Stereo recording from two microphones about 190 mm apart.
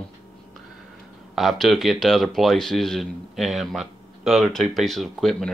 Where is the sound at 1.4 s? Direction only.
Centre (ahead or behind).